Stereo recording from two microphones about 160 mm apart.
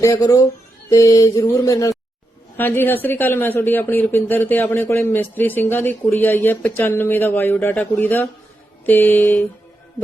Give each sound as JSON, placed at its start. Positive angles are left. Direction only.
{"t": 0.0, "sound": "speech", "side_deg": 20}